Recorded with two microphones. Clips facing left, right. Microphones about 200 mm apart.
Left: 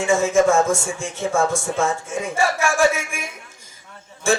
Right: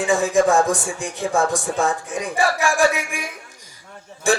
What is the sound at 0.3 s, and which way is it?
Speech, 15° right (ahead or behind).